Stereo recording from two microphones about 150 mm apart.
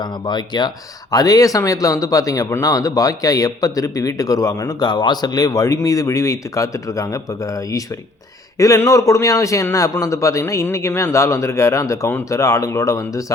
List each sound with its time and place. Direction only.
0.0 s speech: 30° left (ahead or behind)